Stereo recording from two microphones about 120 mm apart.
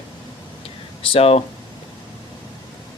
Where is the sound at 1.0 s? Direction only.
50° left (ahead or behind).